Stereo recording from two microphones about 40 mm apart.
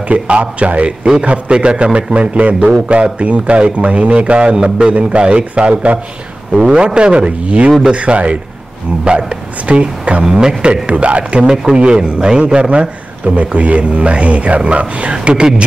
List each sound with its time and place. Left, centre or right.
0.1 s a man's voice: right
6.5 s a man's voice: right
10.2 s a man's voice: centre
10.6 s a man's voice: right
11.4 s a man's voice: centre
12.6 s a man's voice: right